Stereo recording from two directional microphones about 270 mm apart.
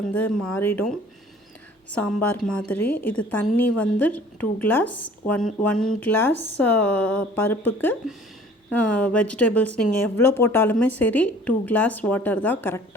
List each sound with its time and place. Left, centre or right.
0.5 s a woman's voice: centre
2.0 s a woman's voice: centre
5.7 s speech: left
6.0 s a woman's voice: centre